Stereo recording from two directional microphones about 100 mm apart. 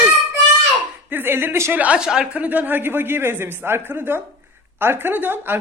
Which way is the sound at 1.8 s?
10° right (ahead or behind).